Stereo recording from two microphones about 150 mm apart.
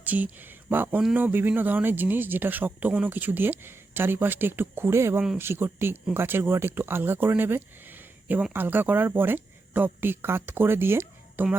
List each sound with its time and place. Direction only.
0.0 s speech: 10° right (ahead or behind)